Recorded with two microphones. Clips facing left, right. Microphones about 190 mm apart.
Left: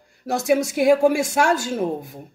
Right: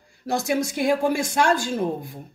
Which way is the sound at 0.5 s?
5° left (ahead or behind).